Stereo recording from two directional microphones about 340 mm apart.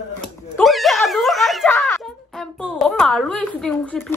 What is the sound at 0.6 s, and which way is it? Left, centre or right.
Speech, centre.